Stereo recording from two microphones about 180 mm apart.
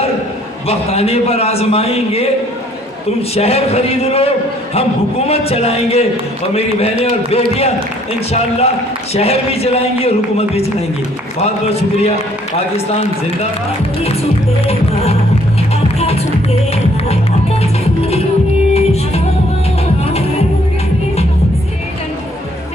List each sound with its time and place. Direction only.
0.7 s speech: 35° left (ahead or behind)
16.0 s music: 35° left (ahead or behind)
17.6 s music: 35° left (ahead or behind)